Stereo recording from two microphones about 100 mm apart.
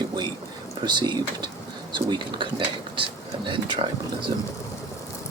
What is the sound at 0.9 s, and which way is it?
Speech, 50° right (ahead or behind).